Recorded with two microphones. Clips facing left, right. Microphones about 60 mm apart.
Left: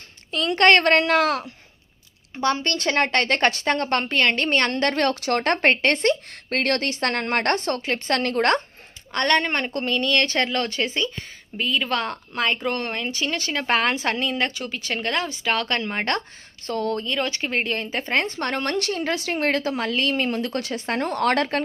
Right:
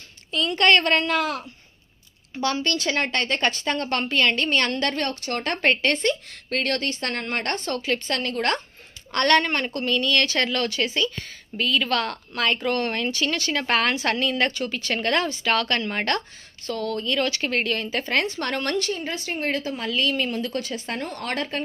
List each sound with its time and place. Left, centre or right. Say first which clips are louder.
0.3 s a woman's voice: left 2 dB; left
2.3 s speech: left 2 dB; left
4.9 s a woman's voice: left 5 dB; left
7.7 s speech: right 1 dB; left
8.0 s a woman's voice: left 4 dB; left
9.1 s speech: right 1 dB; centre
14.4 s speech: right 2 dB; centre
15.2 s speech: right 1 dB; centre
16.6 s speech: left 2 dB; left
18.8 s speech: left 3 dB; left
19.9 s speech: right 2 dB; left